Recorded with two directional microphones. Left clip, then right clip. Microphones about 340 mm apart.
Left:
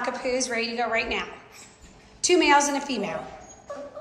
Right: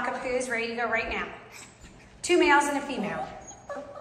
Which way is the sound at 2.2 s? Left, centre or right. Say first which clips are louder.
Left 2 dB; centre.